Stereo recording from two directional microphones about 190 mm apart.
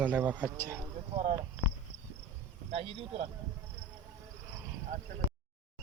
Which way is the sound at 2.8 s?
30° right (ahead or behind).